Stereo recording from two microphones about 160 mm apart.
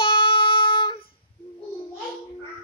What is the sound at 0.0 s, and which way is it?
Singing, 35° left (ahead or behind).